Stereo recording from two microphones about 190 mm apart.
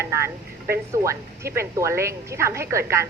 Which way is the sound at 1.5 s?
15° right (ahead or behind).